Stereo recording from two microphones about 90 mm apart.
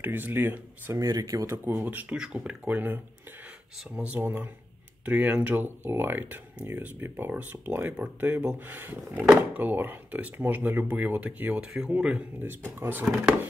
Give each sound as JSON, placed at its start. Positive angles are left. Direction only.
{"t": 0.0, "sound": "speech", "side_deg": -20}
{"t": 0.9, "sound": "speech", "side_deg": -40}
{"t": 1.6, "sound": "speech", "side_deg": -20}
{"t": 11.6, "sound": "speech", "side_deg": -5}
{"t": 12.4, "sound": "speech", "side_deg": -25}